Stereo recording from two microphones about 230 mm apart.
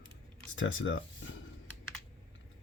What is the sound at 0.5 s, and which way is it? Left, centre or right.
Speech, left.